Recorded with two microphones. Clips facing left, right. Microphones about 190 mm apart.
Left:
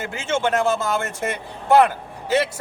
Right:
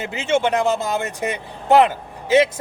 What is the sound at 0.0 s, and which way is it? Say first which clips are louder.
Speech: right 3 dB; 20° right (ahead or behind).